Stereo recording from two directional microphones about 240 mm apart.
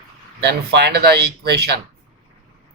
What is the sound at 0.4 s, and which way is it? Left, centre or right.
Speech, right.